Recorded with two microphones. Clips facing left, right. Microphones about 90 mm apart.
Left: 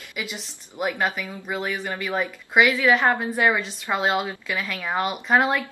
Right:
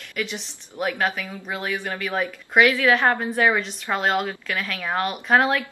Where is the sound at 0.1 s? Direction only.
10° left (ahead or behind).